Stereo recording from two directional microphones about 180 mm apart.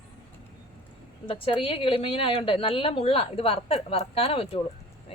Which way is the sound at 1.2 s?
30° left (ahead or behind).